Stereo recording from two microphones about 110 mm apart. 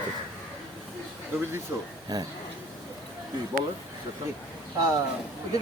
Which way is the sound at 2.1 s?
35° right (ahead or behind).